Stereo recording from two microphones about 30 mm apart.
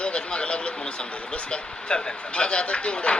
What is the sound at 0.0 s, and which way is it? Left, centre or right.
A man's voice, left.